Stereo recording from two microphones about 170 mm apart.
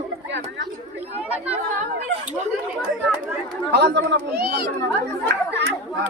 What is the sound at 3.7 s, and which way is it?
Speech, 85° right.